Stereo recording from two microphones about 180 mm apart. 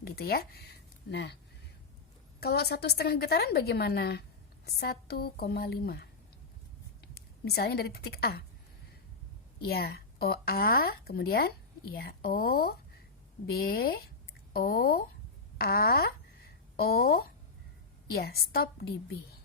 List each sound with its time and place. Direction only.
0.2 s a woman's voice: 60° left (ahead or behind)
1.1 s speech: 70° left (ahead or behind)
2.4 s a woman's voice: 65° left (ahead or behind)
9.6 s a woman's voice: 60° left (ahead or behind)
15.5 s a sound: 60° left (ahead or behind)
18.1 s a woman's voice: 60° left (ahead or behind)